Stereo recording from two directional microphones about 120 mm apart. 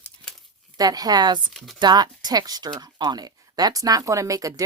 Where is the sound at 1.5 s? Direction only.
Centre (ahead or behind).